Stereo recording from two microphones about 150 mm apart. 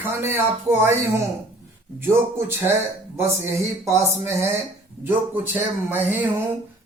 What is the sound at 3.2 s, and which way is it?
Speech, 20° right (ahead or behind).